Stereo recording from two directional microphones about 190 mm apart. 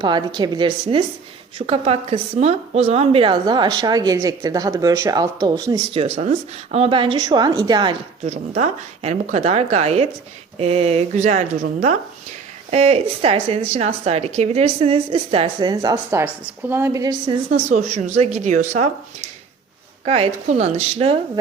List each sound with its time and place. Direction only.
0.0 s a woman's voice: 25° right (ahead or behind)
5.9 s a woman's voice: 30° right (ahead or behind)
8.2 s speech: 35° right (ahead or behind)
12.7 s a woman's voice: 35° right (ahead or behind)
17.5 s speech: 35° right (ahead or behind)
20.1 s speech: 35° right (ahead or behind)